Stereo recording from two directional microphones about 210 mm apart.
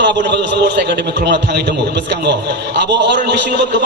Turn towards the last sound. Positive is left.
turn(degrees=-55)  # may be behind; listen again after turning